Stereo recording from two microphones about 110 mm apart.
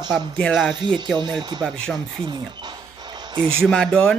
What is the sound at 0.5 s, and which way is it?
Speech, centre (ahead or behind).